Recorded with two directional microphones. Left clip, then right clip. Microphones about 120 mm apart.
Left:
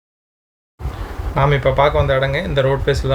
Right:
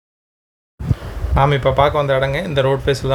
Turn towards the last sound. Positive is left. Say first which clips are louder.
# even
turn(degrees=-25)  # may be behind; listen again after turning